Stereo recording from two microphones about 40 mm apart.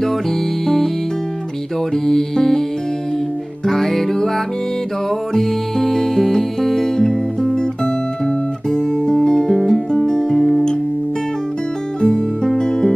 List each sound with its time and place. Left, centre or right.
0.0 s music: centre
2.0 s music: centre
3.6 s music: centre
7.5 s guitar: centre
9.7 s music: centre
12.0 s music: left